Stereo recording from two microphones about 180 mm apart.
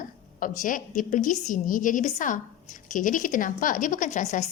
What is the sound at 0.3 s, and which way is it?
A woman's voice, 45° left (ahead or behind).